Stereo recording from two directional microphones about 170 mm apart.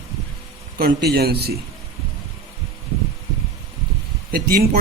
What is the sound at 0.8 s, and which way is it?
Speech, 70° right (ahead or behind).